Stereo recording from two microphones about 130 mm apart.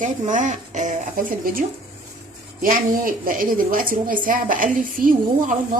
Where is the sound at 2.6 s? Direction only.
90° right.